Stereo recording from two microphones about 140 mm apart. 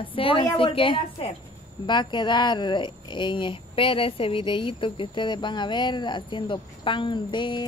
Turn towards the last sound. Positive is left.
turn(degrees=35)  # may be behind; listen again after turning